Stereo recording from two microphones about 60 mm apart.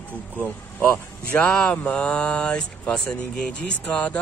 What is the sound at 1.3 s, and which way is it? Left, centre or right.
Speech, centre.